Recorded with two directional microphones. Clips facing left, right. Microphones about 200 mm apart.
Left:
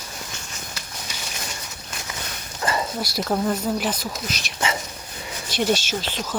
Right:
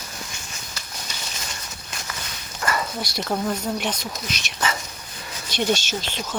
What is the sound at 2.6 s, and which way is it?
Dog, 25° left (ahead or behind).